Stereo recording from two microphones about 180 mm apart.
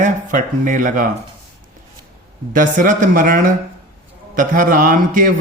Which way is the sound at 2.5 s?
45° right (ahead or behind).